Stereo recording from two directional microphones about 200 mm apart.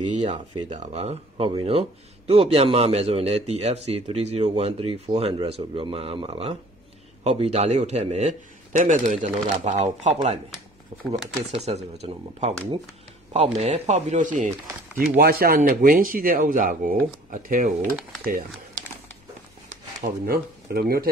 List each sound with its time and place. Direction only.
0.7 s speech: 35° right (ahead or behind)
13.6 s speech: 30° right (ahead or behind)
20.0 s speech: 50° right (ahead or behind)